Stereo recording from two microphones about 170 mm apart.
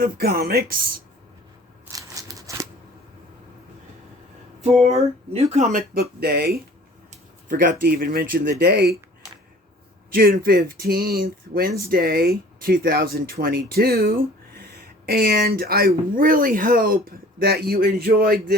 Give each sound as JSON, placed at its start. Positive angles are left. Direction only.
{"t": 0.0, "sound": "speech", "side_deg": -60}
{"t": 1.9, "sound": "scissors", "side_deg": -20}
{"t": 4.8, "sound": "speech", "side_deg": -35}
{"t": 5.9, "sound": "speech", "side_deg": -65}
{"t": 7.1, "sound": "speech", "side_deg": -55}
{"t": 10.1, "sound": "speech", "side_deg": -60}